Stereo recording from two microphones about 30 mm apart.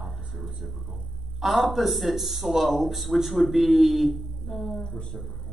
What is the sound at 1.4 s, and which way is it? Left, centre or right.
Speech, centre.